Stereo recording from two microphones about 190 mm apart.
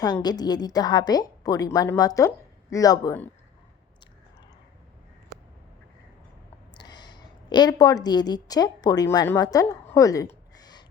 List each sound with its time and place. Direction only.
0.0 s a woman's voice: 20° left (ahead or behind)
6.7 s a woman's voice: 20° left (ahead or behind)
10.5 s a sound: 20° left (ahead or behind)